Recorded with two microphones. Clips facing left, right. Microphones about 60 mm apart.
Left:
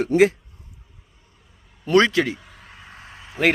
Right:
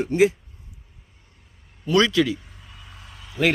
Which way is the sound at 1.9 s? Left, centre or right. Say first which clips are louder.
Left 2 dB; left.